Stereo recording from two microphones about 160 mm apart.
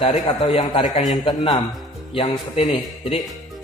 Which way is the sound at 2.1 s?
40° left (ahead or behind).